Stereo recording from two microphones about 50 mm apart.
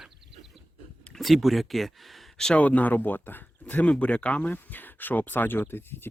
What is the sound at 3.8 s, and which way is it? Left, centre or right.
Speech, left.